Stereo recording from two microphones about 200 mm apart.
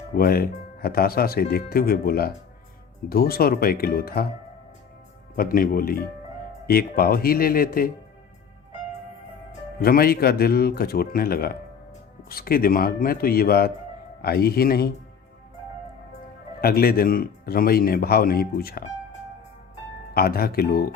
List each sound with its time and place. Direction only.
0.2 s speech: 50° left (ahead or behind)
5.4 s speech: 45° left (ahead or behind)
9.8 s speech: 50° left (ahead or behind)
16.6 s speech: 50° left (ahead or behind)
20.1 s speech: 50° left (ahead or behind)